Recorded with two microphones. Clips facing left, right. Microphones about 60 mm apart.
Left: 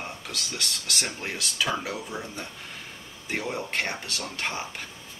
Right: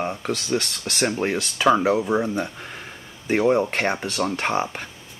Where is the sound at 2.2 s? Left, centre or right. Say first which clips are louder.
Right 12 dB; right.